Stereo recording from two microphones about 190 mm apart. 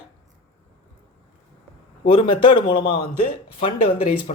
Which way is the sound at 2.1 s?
25° left (ahead or behind).